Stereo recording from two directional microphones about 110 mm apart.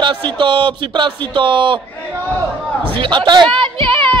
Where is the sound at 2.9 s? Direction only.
45° right (ahead or behind).